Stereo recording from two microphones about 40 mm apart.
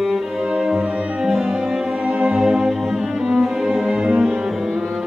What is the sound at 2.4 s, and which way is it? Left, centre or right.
Music, centre.